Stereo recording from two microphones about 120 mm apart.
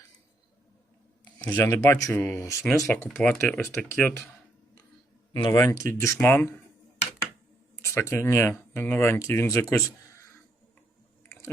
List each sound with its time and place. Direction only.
1.5 s speech: 20° left (ahead or behind)
2.8 s speech: 10° left (ahead or behind)
5.5 s speech: 20° left (ahead or behind)
7.8 s speech: 20° left (ahead or behind)